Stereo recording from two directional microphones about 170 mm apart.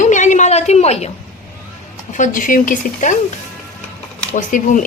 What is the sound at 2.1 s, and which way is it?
A woman's voice, 50° left (ahead or behind).